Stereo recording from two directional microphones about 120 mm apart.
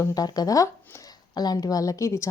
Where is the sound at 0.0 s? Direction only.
30° left (ahead or behind).